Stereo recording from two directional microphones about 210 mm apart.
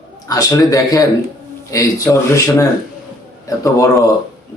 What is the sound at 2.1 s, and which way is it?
Speech, 10° left (ahead or behind).